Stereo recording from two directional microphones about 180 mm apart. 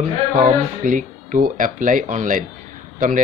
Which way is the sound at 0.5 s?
45° right (ahead or behind).